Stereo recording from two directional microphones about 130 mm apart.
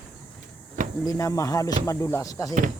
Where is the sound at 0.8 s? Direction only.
85° right.